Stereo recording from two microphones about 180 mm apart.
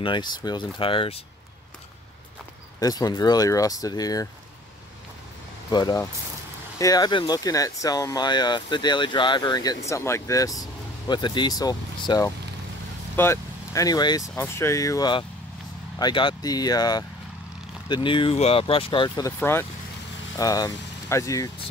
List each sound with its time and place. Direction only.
0.0 s speech: 25° left (ahead or behind)
2.8 s speech: 20° left (ahead or behind)
5.7 s speech: 20° left (ahead or behind)